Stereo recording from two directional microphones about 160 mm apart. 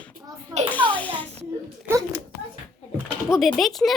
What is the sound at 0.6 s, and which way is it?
Children playing, 10° left (ahead or behind).